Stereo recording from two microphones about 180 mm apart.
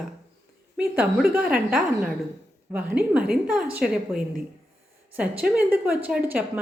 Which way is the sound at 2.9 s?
5° right (ahead or behind).